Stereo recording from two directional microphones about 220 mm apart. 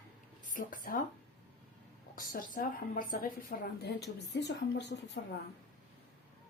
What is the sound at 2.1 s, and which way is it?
A woman's voice, 40° left (ahead or behind).